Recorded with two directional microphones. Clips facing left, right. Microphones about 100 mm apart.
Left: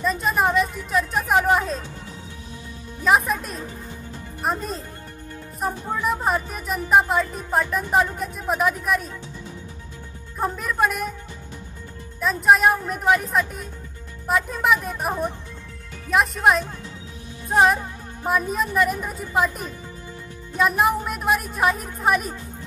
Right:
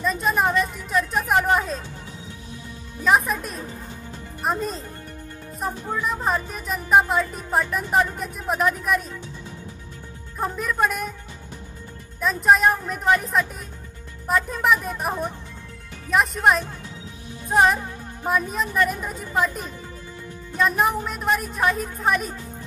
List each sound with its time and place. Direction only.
0.0 s speech: centre (ahead or behind)
3.0 s speech: centre (ahead or behind)
6.2 s speech: 5° left (ahead or behind)
10.4 s speech: centre (ahead or behind)
12.2 s speech: centre (ahead or behind)
17.5 s music: centre (ahead or behind)
18.2 s speech: centre (ahead or behind)